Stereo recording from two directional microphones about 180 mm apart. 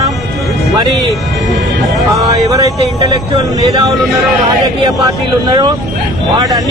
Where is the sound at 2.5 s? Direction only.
20° right (ahead or behind).